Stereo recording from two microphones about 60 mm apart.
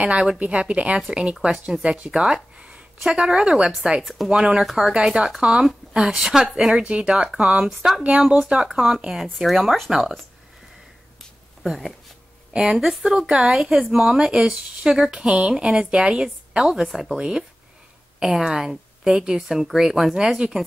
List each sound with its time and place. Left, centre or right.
0.0 s a woman's voice: centre
2.0 s a sound: centre
3.0 s a woman's voice: centre
4.0 s speech: centre
4.3 s a woman's voice: centre
4.9 s a woman's voice: centre
7.7 s speech: centre
8.3 s a woman's voice: centre
11.6 s a woman's voice: centre